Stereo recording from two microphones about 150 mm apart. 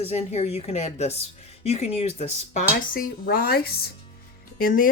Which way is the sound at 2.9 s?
80° left.